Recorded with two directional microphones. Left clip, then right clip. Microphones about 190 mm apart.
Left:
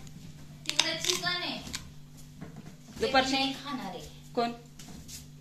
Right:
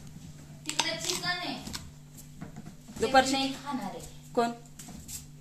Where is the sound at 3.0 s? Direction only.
15° right (ahead or behind).